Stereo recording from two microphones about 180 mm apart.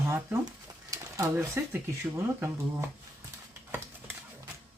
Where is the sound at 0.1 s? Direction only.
15° right (ahead or behind).